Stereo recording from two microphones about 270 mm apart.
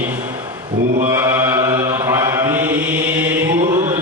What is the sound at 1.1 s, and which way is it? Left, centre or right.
Mantra, centre.